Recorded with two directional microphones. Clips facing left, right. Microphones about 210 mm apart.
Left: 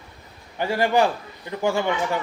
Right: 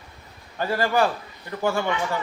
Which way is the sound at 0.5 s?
15° left (ahead or behind).